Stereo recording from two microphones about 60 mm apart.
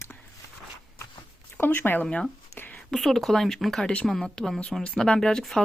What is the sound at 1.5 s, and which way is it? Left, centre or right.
Speech, left.